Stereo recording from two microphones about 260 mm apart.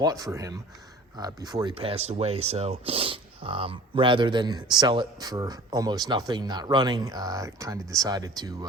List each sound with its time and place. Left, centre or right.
0.0 s speech: centre